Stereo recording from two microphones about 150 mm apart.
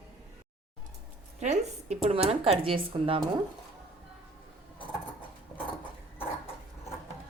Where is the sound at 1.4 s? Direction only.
50° right (ahead or behind).